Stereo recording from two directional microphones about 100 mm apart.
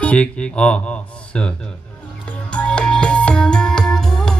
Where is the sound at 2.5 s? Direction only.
10° left (ahead or behind).